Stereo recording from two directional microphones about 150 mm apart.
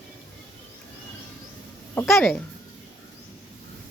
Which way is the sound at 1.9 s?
15° left (ahead or behind).